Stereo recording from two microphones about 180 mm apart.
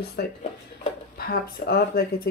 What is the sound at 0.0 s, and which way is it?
Speech, 60° left (ahead or behind).